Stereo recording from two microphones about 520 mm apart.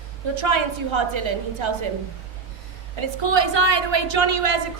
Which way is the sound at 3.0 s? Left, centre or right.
Right.